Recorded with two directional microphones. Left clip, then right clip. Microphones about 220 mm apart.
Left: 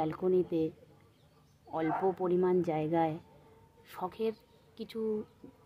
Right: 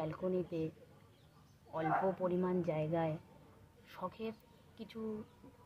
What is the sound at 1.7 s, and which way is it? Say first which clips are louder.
A woman's voice: left 3 dB; 55° left (ahead or behind).